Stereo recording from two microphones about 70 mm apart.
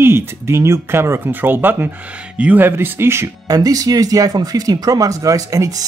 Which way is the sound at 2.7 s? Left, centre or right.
Right.